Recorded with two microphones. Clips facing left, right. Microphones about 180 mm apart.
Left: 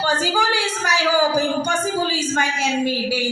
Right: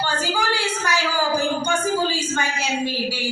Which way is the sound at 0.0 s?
45° left (ahead or behind).